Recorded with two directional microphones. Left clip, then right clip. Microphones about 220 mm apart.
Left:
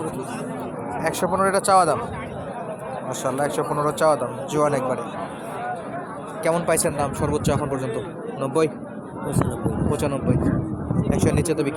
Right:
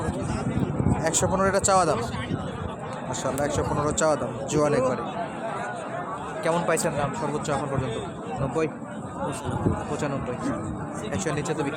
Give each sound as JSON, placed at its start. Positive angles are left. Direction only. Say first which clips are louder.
{"t": 1.0, "sound": "speech", "louder": "left 3 dB", "side_deg": -5}
{"t": 3.2, "sound": "speech", "louder": "left 3 dB", "side_deg": 10}
{"t": 6.4, "sound": "a man's voice", "louder": "left 3 dB", "side_deg": 10}
{"t": 9.9, "sound": "speech", "louder": "left 5 dB", "side_deg": 20}
{"t": 11.2, "sound": "a man's voice", "louder": "left 5 dB", "side_deg": 15}